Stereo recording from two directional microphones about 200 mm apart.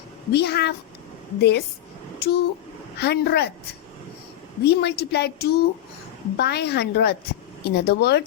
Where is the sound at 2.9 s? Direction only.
55° left (ahead or behind).